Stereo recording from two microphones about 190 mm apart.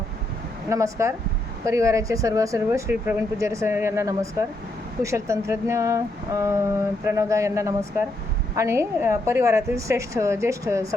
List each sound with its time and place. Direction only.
0.7 s speech: 15° right (ahead or behind)